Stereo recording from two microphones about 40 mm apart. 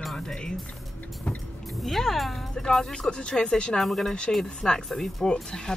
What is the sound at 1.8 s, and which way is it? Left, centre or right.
A woman's voice, centre.